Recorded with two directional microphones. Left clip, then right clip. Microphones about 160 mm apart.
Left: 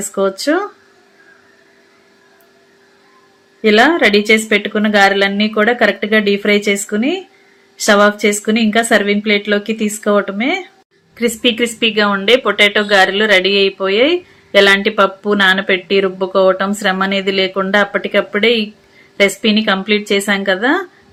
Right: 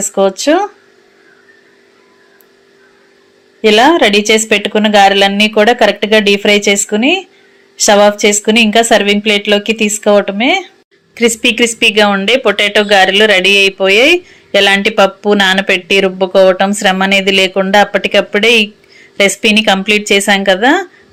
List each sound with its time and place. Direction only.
0.1 s speech: 20° right (ahead or behind)
3.6 s speech: 25° right (ahead or behind)